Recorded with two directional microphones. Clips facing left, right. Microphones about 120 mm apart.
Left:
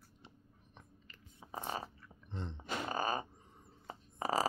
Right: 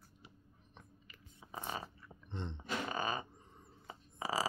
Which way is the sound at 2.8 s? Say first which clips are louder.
Left 4 dB; 40° left (ahead or behind).